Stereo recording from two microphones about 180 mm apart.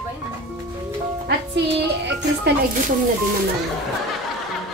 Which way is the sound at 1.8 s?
70° right (ahead or behind).